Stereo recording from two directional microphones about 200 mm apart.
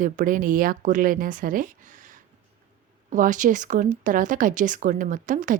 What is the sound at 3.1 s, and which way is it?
Speech, 40° right (ahead or behind).